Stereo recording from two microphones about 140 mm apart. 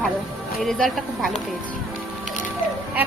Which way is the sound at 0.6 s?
Centre (ahead or behind).